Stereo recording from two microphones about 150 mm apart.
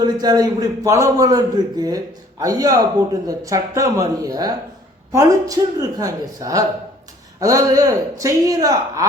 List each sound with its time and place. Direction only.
0.0 s a man's voice: 25° right (ahead or behind)